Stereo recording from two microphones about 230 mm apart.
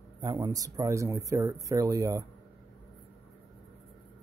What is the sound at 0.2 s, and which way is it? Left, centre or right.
Speech, centre.